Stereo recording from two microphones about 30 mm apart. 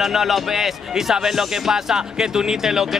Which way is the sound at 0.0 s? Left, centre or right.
Centre.